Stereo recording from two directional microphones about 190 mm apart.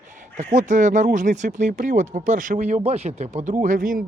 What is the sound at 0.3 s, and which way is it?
Speech, 40° right (ahead or behind).